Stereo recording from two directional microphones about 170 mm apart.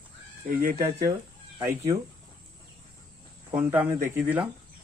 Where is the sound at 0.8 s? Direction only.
20° right (ahead or behind).